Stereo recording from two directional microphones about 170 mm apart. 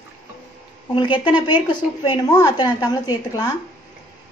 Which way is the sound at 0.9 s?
30° left (ahead or behind).